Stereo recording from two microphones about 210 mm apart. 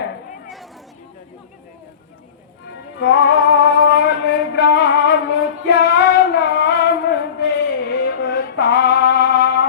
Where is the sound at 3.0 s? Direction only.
60° left (ahead or behind).